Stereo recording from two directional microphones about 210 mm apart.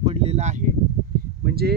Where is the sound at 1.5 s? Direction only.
45° right (ahead or behind).